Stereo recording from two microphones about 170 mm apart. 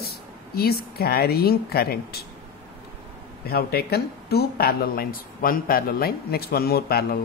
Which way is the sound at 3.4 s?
65° left (ahead or behind).